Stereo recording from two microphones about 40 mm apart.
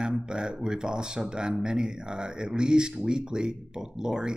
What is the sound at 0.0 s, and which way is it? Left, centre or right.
Speech, centre.